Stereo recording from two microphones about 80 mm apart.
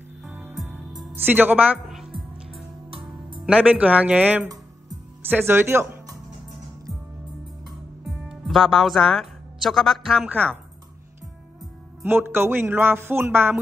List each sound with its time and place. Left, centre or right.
0.3 s music: right
1.1 s a man's voice: right
2.9 s music: right
3.4 s speech: centre
5.5 s a man's voice: right
8.0 s speech: centre
10.2 s a man's voice: right
12.0 s a man's voice: right